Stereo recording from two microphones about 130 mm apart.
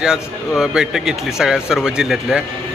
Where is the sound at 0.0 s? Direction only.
5° right (ahead or behind).